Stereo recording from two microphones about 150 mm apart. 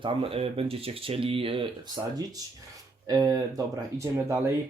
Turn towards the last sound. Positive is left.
turn(degrees=-20)  # may be behind; listen again after turning